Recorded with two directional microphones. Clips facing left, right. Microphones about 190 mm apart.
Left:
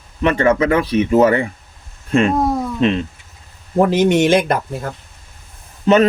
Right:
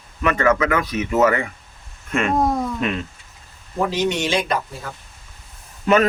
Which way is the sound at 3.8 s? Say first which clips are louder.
Left 8 dB; 50° left (ahead or behind).